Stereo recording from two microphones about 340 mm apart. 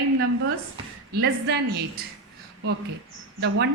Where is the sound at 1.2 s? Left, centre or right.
Right.